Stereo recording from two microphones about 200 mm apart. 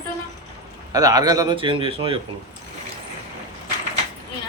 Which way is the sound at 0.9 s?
20° right (ahead or behind).